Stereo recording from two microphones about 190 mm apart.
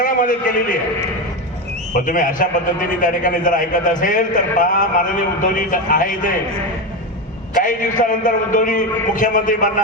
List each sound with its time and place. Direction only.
0.0 s a man's voice: 45° left (ahead or behind)
1.9 s a man's voice: 45° left (ahead or behind)
7.5 s a man's voice: 45° left (ahead or behind)